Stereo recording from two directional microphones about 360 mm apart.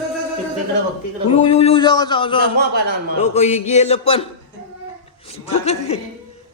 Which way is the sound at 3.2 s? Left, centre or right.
Centre.